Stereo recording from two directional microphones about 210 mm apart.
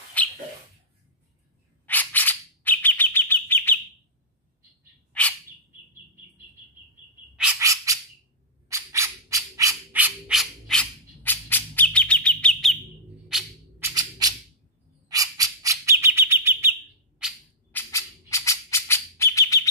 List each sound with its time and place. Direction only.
0.2 s bird: 5° left (ahead or behind)
1.9 s bird: 10° left (ahead or behind)
7.3 s bird: 5° right (ahead or behind)
7.6 s bird: 15° right (ahead or behind)
8.6 s squawk: 15° right (ahead or behind); by 12.7 s 5° left (ahead or behind)
13.3 s music: 5° right (ahead or behind)
15.0 s bird: 15° right (ahead or behind)
17.2 s a sound: 5° right (ahead or behind)
17.7 s bird: 15° left (ahead or behind)